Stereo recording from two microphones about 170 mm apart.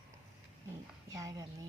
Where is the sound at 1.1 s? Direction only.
20° right (ahead or behind).